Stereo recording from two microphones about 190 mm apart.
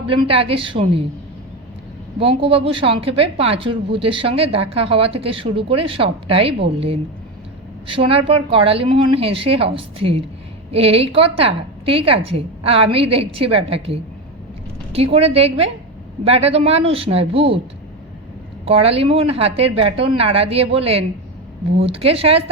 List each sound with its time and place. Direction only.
0.1 s speech: 30° right (ahead or behind)
2.1 s a woman's voice: 30° right (ahead or behind)
18.6 s a woman's voice: 30° right (ahead or behind)